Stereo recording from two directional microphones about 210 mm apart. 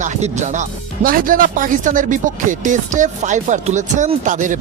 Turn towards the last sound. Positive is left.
turn(degrees=-35)  # may be behind; listen again after turning